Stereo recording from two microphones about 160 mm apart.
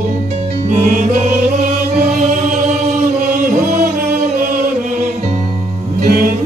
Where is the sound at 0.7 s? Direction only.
50° right (ahead or behind).